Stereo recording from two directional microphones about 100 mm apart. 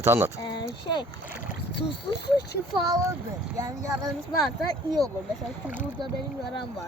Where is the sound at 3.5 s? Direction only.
30° right (ahead or behind).